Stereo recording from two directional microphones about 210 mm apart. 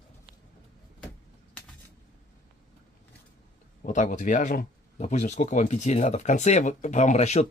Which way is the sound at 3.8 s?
35° left (ahead or behind).